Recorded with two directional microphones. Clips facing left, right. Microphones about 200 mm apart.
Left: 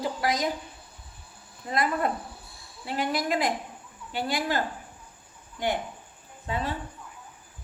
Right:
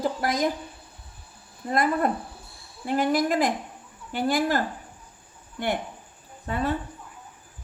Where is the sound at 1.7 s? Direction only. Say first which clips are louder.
Right 3 dB; 45° right (ahead or behind).